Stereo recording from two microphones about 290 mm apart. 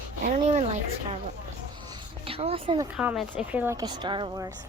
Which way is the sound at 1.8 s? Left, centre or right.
Centre.